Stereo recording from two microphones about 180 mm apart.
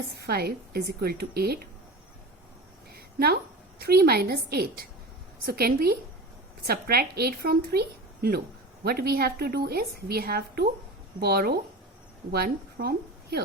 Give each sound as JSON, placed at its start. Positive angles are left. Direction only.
{"t": 0.3, "sound": "a woman's voice", "side_deg": -60}
{"t": 2.9, "sound": "a sound", "side_deg": -60}
{"t": 3.8, "sound": "a woman's voice", "side_deg": -60}